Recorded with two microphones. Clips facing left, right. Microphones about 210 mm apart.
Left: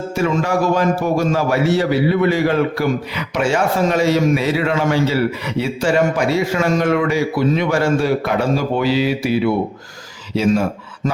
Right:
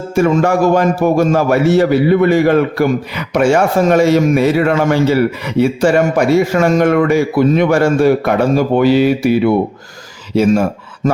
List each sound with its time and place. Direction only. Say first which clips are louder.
0.1 s a man's voice: right 7 dB; 50° right (ahead or behind)